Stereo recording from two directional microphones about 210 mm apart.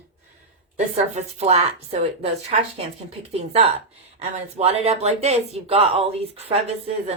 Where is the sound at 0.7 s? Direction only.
35° right (ahead or behind).